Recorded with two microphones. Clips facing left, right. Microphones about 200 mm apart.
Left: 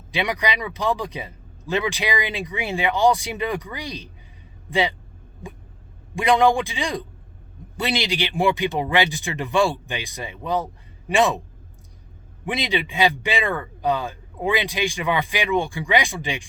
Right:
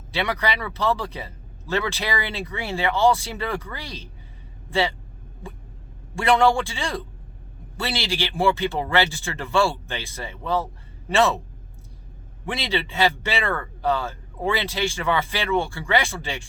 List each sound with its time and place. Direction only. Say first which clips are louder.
0.1 s speech: left 1 dB; 15° left (ahead or behind)
6.1 s speech: left 1 dB; 15° left (ahead or behind)
12.5 s speech: left 2 dB; 15° left (ahead or behind)